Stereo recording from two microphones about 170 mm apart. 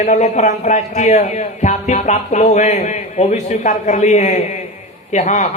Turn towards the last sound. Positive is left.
turn(degrees=45)  # may be behind; listen again after turning